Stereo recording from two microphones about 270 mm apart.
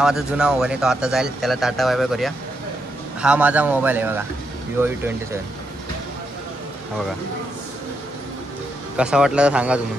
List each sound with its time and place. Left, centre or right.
0.0 s speech: centre
8.9 s speech: centre